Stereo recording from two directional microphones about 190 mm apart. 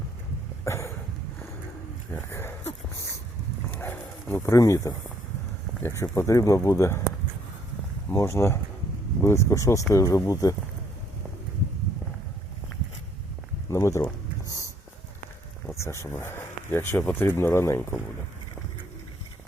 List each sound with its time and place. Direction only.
0.6 s a sound: 15° left (ahead or behind)
2.3 s speech: 10° left (ahead or behind)
3.7 s dog: 10° left (ahead or behind)
6.0 s speech: 15° left (ahead or behind)
8.1 s speech: 15° left (ahead or behind)
13.7 s a sound: 15° left (ahead or behind)
15.8 s speech: 15° left (ahead or behind)